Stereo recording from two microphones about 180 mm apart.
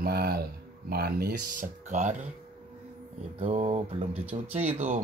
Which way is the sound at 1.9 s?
40° right (ahead or behind).